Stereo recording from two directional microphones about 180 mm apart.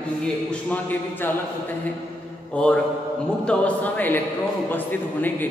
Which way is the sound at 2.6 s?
5° left (ahead or behind).